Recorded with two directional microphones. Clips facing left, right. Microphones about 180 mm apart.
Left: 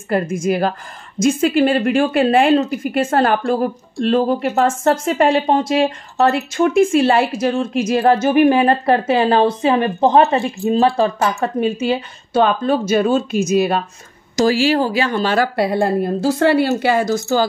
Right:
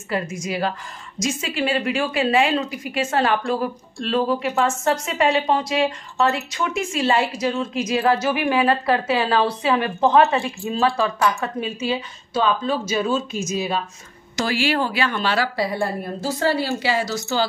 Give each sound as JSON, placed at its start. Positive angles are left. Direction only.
{"t": 0.1, "sound": "a woman's voice", "side_deg": 50}
{"t": 4.5, "sound": "a woman's voice", "side_deg": 50}
{"t": 14.3, "sound": "a woman's voice", "side_deg": 40}